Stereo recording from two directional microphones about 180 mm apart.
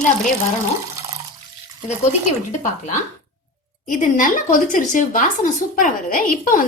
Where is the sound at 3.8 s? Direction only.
50° left (ahead or behind).